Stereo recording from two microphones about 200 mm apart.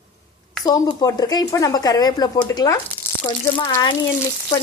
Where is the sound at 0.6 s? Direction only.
20° left (ahead or behind).